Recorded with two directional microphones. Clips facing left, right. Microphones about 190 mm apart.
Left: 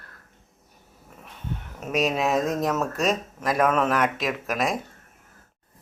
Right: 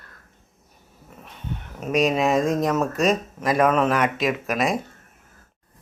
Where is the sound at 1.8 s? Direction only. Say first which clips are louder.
Right 4 dB; centre (ahead or behind).